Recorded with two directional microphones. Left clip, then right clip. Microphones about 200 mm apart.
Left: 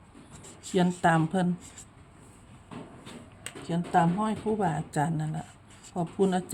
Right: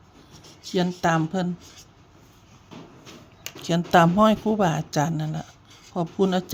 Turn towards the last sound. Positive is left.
turn(degrees=-15)  # may be behind; listen again after turning